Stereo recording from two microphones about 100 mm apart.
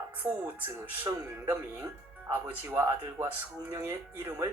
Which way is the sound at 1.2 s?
30° right (ahead or behind).